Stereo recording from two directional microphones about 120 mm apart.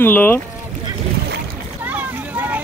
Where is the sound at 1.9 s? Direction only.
15° right (ahead or behind).